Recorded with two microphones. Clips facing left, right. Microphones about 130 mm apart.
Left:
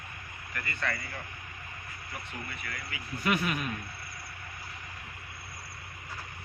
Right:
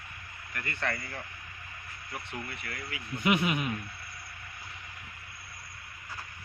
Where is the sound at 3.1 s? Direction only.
20° right (ahead or behind).